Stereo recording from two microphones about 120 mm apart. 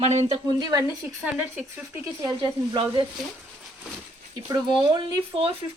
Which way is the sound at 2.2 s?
45° right (ahead or behind).